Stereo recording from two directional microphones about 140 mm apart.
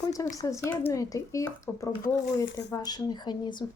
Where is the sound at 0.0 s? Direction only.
25° left (ahead or behind).